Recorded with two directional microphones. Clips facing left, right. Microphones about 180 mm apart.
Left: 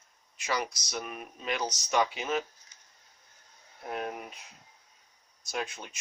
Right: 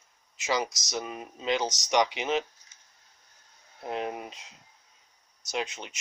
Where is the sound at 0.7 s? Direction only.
90° right.